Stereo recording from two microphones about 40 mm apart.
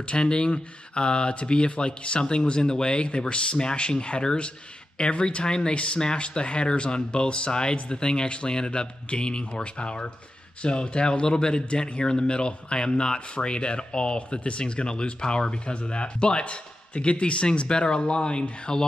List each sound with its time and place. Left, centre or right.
0.1 s speech: left